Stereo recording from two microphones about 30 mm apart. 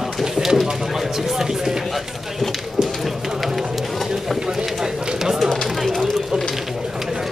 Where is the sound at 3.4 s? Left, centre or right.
Centre.